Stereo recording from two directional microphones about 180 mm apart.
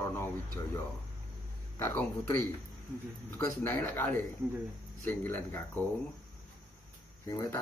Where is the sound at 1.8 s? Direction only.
15° left (ahead or behind).